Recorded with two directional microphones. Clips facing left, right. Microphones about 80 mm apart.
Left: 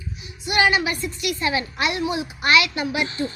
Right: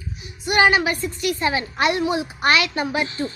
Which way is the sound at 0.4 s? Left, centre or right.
Right.